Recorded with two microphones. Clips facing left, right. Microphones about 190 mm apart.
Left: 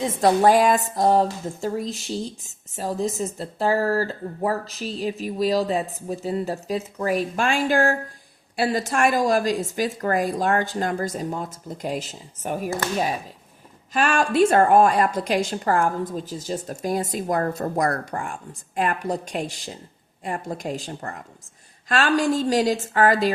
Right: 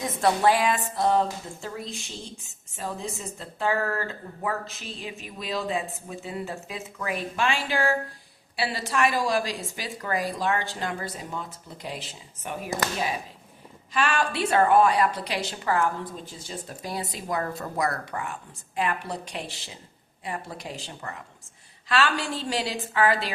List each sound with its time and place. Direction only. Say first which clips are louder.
0.0 s a woman's voice: left 5 dB; 35° left (ahead or behind)